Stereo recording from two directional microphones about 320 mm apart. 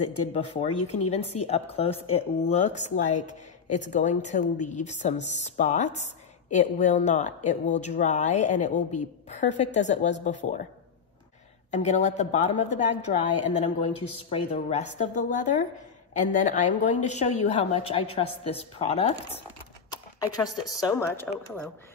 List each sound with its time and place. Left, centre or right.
0.3 s speech: centre
11.7 s speech: left
19.9 s a sound: centre
20.6 s speech: centre